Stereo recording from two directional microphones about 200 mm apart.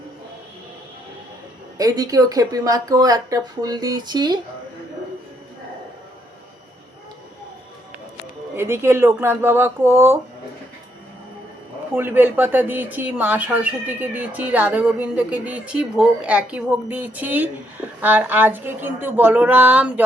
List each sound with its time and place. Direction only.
1.8 s speech: 20° right (ahead or behind)
8.5 s speech: 10° right (ahead or behind)
11.9 s speech: 10° right (ahead or behind)